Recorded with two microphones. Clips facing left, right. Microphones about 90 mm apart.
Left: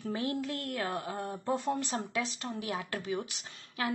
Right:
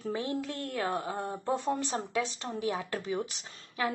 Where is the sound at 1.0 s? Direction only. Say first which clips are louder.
Right 2 dB; 35° right (ahead or behind).